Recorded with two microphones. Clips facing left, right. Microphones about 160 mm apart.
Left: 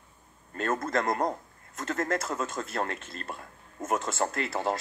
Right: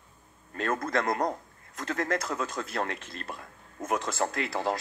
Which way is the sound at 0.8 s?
40° left (ahead or behind).